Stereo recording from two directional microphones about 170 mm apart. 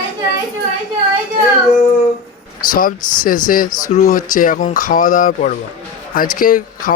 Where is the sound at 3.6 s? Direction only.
25° left (ahead or behind).